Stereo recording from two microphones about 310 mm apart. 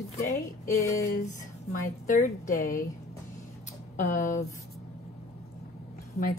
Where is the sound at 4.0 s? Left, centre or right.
Left.